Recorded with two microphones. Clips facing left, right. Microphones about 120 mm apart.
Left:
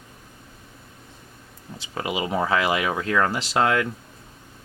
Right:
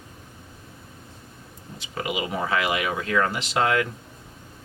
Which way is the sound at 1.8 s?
30° left (ahead or behind).